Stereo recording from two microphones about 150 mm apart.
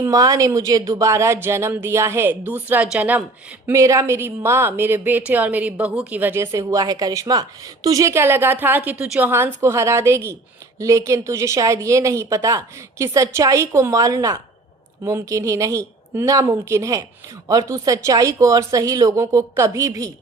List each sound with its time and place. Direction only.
0.0 s a woman's voice: 25° right (ahead or behind)
3.7 s a woman's voice: 20° right (ahead or behind)